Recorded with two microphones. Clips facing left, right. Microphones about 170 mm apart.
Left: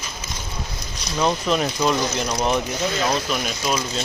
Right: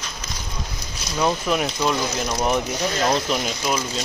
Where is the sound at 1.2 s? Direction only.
10° right (ahead or behind).